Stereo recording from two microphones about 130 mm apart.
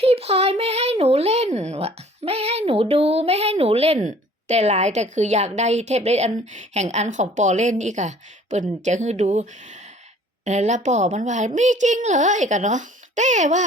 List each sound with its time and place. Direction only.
0.0 s a child's voice: 50° right (ahead or behind); by 13.7 s 65° right (ahead or behind)